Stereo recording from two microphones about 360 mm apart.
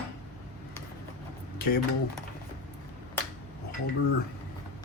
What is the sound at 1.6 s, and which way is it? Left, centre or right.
Speech, left.